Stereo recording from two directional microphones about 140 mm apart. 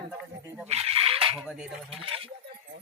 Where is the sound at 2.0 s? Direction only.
40° right (ahead or behind).